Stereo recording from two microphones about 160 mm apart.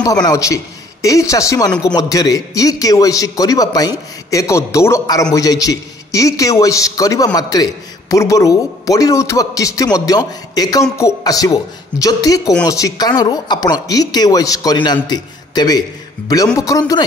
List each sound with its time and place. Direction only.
0.0 s a man's voice: 20° left (ahead or behind)
1.7 s speech: 5° left (ahead or behind)
2.0 s a man's voice: 20° left (ahead or behind)